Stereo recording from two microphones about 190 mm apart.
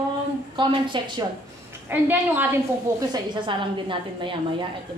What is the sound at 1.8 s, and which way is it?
Speech, 10° right (ahead or behind).